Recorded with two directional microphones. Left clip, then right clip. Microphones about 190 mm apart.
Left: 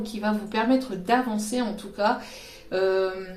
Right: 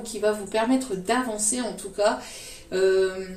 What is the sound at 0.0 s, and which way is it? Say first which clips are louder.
A woman's voice: right 4 dB; 30° left (ahead or behind).